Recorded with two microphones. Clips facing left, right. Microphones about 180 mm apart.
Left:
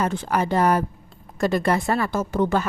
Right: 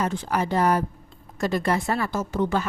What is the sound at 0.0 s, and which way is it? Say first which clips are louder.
A woman's voice: left 2 dB; 55° left (ahead or behind).